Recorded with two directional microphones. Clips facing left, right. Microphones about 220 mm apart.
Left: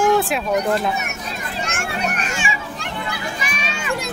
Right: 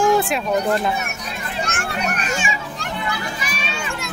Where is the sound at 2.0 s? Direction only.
40° right (ahead or behind).